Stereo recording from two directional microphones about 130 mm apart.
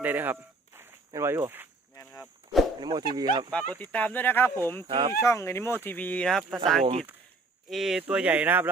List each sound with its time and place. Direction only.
0.0 s speech: 15° right (ahead or behind)
2.2 s speech: centre (ahead or behind)
2.8 s speech: 35° right (ahead or behind)
3.8 s speech: 10° left (ahead or behind)
4.9 s speech: 35° right (ahead or behind)
5.2 s speech: 20° left (ahead or behind); by 6.6 s 5° left (ahead or behind)
7.7 s speech: centre (ahead or behind)